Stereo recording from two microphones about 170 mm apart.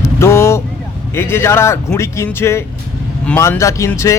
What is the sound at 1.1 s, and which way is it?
Speech, 15° left (ahead or behind).